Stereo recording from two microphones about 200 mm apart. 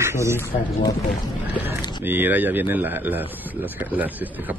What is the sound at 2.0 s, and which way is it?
Speech, 10° right (ahead or behind).